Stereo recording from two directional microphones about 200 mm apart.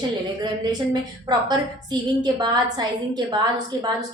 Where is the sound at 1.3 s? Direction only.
20° right (ahead or behind).